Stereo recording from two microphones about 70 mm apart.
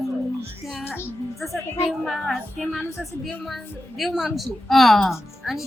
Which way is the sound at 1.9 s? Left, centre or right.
Centre.